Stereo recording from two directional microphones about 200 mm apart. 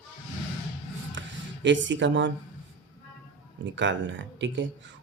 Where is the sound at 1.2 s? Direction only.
65° right (ahead or behind).